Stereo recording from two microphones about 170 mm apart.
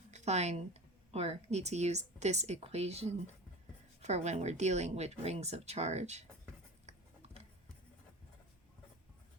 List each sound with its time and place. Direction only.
0.1 s speech: 40° right (ahead or behind)